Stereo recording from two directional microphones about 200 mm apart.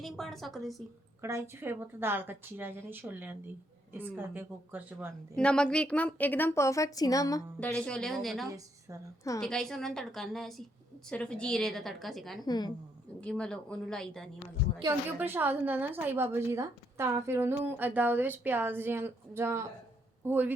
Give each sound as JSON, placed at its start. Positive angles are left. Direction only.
{"t": 0.0, "sound": "a woman's voice", "side_deg": 0}
{"t": 1.2, "sound": "a woman's voice", "side_deg": -15}
{"t": 5.4, "sound": "a woman's voice", "side_deg": 5}
{"t": 7.7, "sound": "a woman's voice", "side_deg": 5}
{"t": 8.4, "sound": "a woman's voice", "side_deg": -15}
{"t": 9.4, "sound": "a woman's voice", "side_deg": 5}
{"t": 12.5, "sound": "a woman's voice", "side_deg": 20}
{"t": 13.2, "sound": "a woman's voice", "side_deg": 5}
{"t": 14.8, "sound": "a woman's voice", "side_deg": -15}